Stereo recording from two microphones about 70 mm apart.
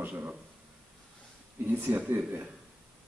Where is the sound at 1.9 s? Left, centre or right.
Right.